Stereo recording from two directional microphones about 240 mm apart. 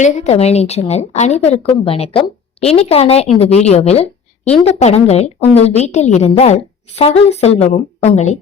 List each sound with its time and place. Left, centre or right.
0.0 s a woman's voice: left